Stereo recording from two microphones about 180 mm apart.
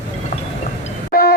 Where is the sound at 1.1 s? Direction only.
55° left (ahead or behind).